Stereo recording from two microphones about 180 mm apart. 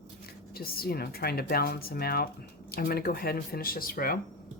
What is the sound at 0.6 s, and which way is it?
A woman's voice, 55° left (ahead or behind).